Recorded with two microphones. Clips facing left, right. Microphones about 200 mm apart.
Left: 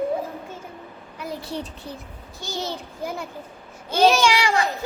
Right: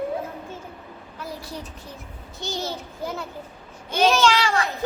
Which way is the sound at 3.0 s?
10° left (ahead or behind).